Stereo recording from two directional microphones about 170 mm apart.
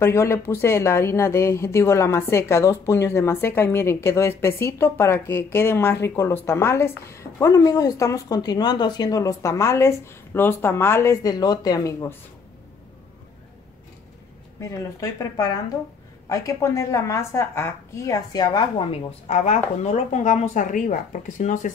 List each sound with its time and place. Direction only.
0.0 s speech: 15° left (ahead or behind)
14.6 s a woman's voice: 20° left (ahead or behind); by 21.7 s 45° left (ahead or behind)